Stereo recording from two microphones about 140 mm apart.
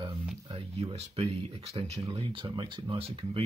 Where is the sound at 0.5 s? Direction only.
45° right (ahead or behind).